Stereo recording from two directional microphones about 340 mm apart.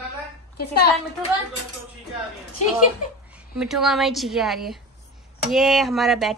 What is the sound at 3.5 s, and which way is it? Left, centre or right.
Child singing, centre.